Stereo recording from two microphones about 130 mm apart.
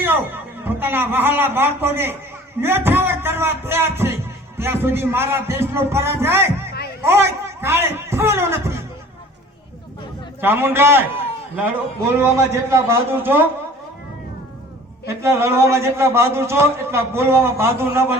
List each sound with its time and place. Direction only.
0.0 s a man's voice: 15° right (ahead or behind)
10.4 s a man's voice: 15° right (ahead or behind)
12.2 s a man's voice: 20° right (ahead or behind)
15.0 s a man's voice: 20° right (ahead or behind)